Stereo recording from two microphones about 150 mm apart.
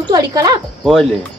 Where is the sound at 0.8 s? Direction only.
Centre (ahead or behind).